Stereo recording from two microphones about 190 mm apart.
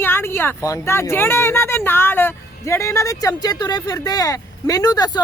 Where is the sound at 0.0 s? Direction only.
10° left (ahead or behind).